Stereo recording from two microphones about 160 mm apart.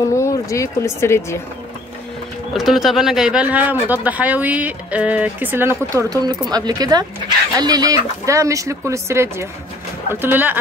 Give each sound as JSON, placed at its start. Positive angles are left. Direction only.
{"t": 0.1, "sound": "speech", "side_deg": 20}
{"t": 2.5, "sound": "speech", "side_deg": 0}